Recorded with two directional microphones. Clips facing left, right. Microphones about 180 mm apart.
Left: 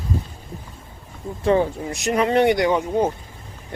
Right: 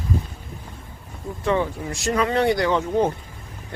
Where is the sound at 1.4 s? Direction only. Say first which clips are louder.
Left 4 dB; 30° left (ahead or behind).